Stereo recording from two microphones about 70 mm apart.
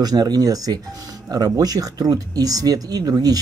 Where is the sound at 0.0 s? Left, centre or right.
Right.